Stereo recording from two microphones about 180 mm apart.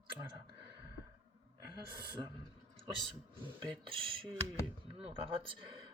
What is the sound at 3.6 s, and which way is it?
Speech, 30° right (ahead or behind).